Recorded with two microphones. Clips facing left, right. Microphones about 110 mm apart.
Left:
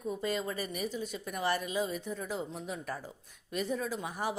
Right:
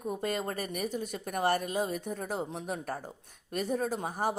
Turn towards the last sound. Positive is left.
turn(degrees=-45)  # may be behind; listen again after turning